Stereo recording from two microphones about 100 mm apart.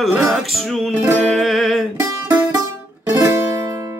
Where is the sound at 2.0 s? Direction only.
40° right (ahead or behind).